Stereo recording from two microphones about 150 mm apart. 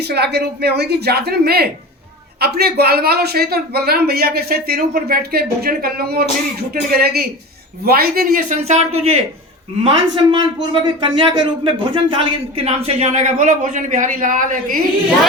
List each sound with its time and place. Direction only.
0.0 s a man's voice: 90° right; by 9.2 s 45° right (ahead or behind)
9.8 s a man's voice: 30° right (ahead or behind); by 14.8 s 60° right (ahead or behind)